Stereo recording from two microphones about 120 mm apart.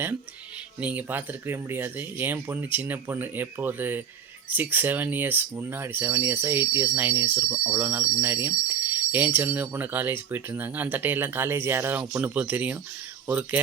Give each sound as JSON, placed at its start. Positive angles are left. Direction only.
{"t": 0.8, "sound": "speech", "side_deg": -10}